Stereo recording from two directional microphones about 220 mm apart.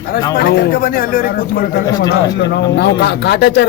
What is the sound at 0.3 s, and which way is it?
A man's voice, 45° left (ahead or behind).